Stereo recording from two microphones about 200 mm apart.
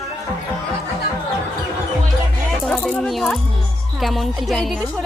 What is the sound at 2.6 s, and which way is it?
A woman's voice, 5° left (ahead or behind).